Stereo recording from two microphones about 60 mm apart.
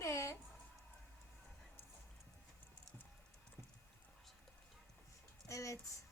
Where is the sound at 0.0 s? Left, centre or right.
Left.